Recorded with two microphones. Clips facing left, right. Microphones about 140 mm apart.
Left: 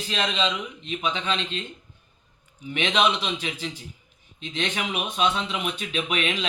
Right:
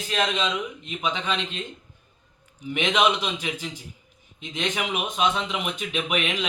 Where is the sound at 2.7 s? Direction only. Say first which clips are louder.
Right 1 dB; 15° right (ahead or behind).